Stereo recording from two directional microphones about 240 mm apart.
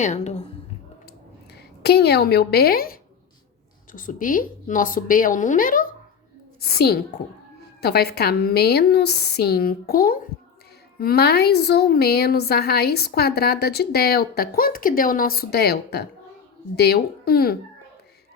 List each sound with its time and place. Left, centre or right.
0.0 s a woman's voice: left
1.8 s a woman's voice: left